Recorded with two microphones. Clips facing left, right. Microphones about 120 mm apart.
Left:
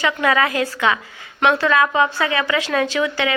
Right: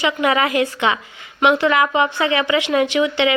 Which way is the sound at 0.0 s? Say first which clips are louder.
Right 1 dB; 20° right (ahead or behind).